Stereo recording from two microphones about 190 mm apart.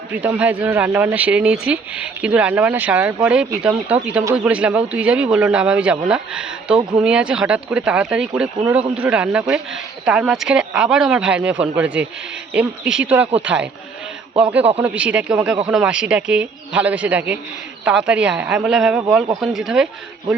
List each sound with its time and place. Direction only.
0.1 s speech: 10° right (ahead or behind)
14.9 s speech: 5° right (ahead or behind)